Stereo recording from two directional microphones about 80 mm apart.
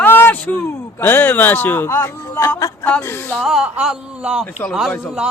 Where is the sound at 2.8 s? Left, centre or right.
Left.